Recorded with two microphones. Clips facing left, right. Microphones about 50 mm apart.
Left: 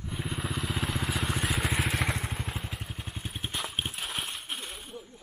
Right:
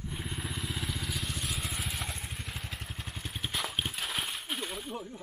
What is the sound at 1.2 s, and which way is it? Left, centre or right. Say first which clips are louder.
Vehicle: left 7 dB; left.